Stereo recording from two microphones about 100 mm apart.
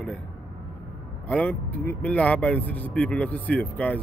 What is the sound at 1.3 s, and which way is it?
Speech, 10° left (ahead or behind).